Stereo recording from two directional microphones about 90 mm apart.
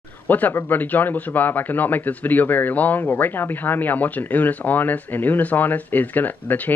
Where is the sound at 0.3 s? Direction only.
20° left (ahead or behind).